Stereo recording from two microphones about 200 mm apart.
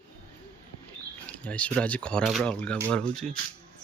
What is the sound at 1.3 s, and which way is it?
Speech, 5° left (ahead or behind).